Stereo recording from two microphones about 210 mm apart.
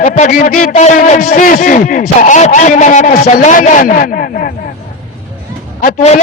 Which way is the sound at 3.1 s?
50° left (ahead or behind).